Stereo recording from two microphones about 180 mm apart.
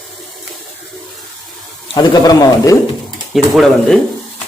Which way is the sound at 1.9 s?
20° left (ahead or behind).